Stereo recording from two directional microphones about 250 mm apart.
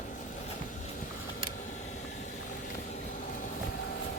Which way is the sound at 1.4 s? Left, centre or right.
Left.